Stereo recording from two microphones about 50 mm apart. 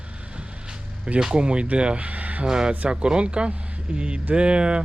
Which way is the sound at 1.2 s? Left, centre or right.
Centre.